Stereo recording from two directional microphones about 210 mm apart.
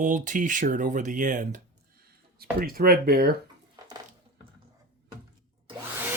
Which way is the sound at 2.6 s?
45° right (ahead or behind).